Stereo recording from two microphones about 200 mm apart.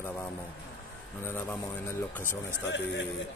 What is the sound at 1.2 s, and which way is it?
Speech, 10° left (ahead or behind).